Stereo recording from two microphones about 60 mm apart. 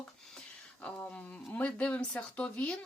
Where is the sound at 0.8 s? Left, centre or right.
Left.